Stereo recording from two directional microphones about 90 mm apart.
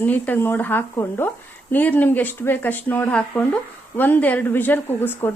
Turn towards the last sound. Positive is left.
turn(degrees=25)  # may be behind; listen again after turning